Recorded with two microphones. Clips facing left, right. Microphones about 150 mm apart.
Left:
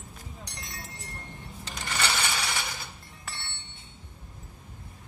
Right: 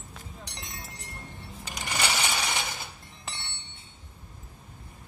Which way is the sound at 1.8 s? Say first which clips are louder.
Right 1 dB; 15° right (ahead or behind).